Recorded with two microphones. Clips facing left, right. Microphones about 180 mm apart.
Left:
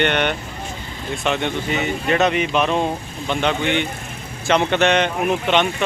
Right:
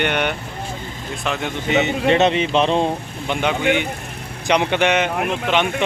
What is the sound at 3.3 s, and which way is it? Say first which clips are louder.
Speech: right 1 dB; 10° right (ahead or behind).